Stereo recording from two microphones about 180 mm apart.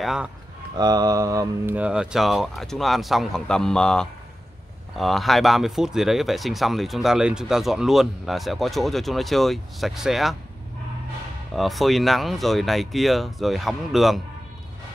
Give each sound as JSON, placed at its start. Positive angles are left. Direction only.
{"t": 0.0, "sound": "speech", "side_deg": 0}
{"t": 0.7, "sound": "mantra", "side_deg": -20}
{"t": 1.8, "sound": "speech", "side_deg": -5}
{"t": 11.5, "sound": "speech", "side_deg": 0}